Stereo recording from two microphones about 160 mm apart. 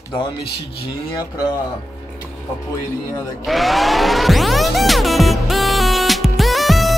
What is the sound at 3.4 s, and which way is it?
Music, centre (ahead or behind).